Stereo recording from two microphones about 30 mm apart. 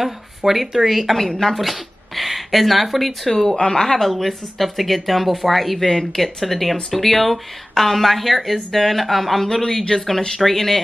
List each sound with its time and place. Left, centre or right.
0.4 s a woman's voice: centre
3.3 s speech: centre
3.5 s a woman's voice: left
3.8 s speech: centre
5.9 s speech: centre
6.2 s speech: centre